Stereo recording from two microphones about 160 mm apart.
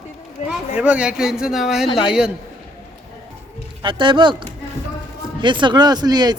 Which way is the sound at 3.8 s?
30° right (ahead or behind).